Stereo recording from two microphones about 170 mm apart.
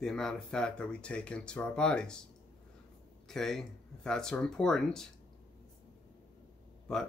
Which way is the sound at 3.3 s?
Centre (ahead or behind).